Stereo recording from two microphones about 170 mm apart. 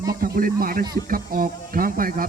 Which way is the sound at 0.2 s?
60° right (ahead or behind).